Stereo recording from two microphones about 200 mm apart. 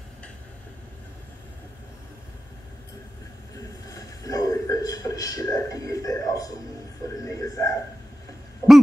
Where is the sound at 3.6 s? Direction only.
15° left (ahead or behind).